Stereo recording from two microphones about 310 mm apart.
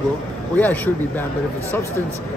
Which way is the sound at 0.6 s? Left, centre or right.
Centre.